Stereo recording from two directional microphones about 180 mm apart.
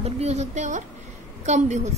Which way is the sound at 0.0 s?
35° right (ahead or behind).